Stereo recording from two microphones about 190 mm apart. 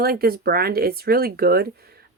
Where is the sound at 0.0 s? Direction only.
55° right (ahead or behind).